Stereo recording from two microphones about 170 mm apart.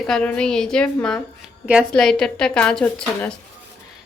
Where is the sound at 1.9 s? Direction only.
5° left (ahead or behind).